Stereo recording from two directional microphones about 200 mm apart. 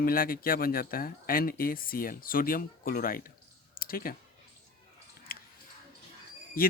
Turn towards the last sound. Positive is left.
turn(degrees=45)  # may be behind; listen again after turning